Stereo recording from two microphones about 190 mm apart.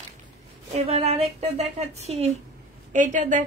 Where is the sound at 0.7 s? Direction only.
35° right (ahead or behind).